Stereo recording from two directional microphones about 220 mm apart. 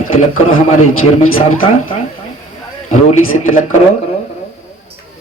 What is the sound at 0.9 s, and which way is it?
Speech, 70° left (ahead or behind).